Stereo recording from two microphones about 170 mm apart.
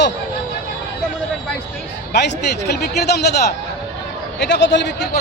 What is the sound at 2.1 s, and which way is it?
A man's voice, 80° left.